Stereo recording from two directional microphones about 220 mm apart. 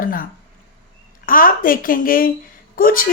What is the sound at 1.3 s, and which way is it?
A woman's voice, 40° left (ahead or behind).